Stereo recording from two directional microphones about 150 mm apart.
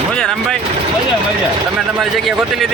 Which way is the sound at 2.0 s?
Centre (ahead or behind).